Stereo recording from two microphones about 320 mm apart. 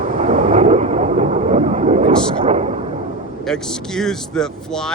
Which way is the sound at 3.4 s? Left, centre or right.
Centre.